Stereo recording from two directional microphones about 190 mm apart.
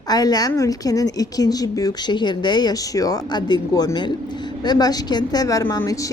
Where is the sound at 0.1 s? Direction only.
20° left (ahead or behind).